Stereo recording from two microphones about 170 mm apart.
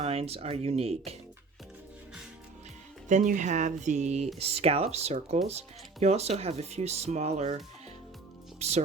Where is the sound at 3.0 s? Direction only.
45° right (ahead or behind).